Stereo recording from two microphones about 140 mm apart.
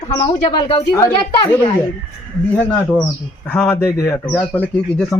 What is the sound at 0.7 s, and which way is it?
Speech, 20° left (ahead or behind).